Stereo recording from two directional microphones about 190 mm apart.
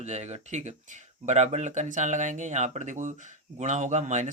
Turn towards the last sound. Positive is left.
turn(degrees=-40)  # may be behind; listen again after turning